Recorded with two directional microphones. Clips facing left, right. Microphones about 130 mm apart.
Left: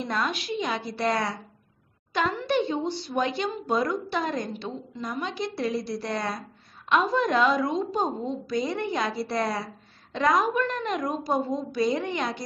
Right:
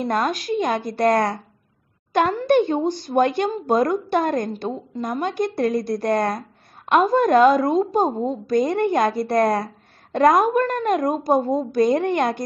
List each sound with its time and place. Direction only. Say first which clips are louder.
0.0 s speech: right 7 dB; 45° right (ahead or behind)